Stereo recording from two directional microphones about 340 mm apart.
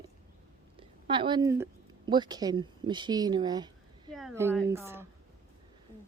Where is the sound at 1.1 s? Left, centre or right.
Centre.